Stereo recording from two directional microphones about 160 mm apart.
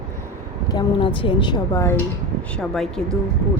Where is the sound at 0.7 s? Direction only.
30° left (ahead or behind).